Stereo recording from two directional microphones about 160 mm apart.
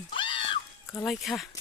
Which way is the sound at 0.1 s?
30° left (ahead or behind).